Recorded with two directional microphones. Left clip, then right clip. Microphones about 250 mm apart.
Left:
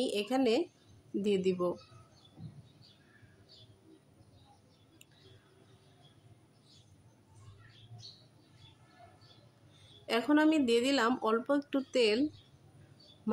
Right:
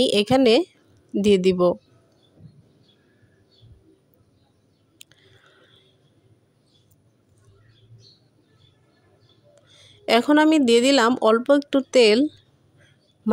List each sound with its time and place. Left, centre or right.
0.0 s a woman's voice: right
5.0 s a sound: right
9.8 s a woman's voice: right